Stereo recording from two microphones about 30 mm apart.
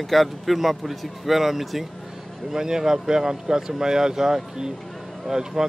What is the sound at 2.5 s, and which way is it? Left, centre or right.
Speech, centre.